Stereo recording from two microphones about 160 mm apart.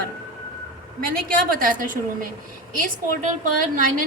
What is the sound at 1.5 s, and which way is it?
A woman's voice, 60° right (ahead or behind).